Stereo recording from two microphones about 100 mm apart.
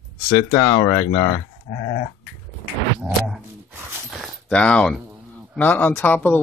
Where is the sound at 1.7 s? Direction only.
55° left (ahead or behind).